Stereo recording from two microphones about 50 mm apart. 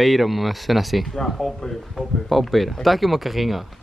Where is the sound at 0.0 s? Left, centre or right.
Centre.